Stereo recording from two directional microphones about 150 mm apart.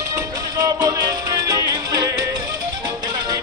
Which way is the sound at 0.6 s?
20° right (ahead or behind).